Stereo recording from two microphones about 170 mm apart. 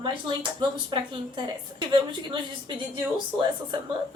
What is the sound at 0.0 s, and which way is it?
Speech, 25° right (ahead or behind).